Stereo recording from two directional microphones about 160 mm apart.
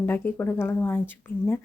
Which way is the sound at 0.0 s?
15° left (ahead or behind).